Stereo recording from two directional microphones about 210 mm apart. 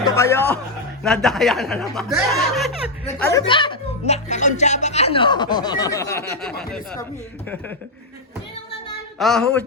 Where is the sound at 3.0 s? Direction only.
15° left (ahead or behind).